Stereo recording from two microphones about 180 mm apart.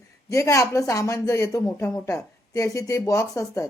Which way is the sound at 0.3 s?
15° left (ahead or behind).